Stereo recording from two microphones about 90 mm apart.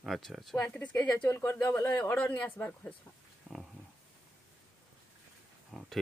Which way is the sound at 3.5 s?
15° right (ahead or behind).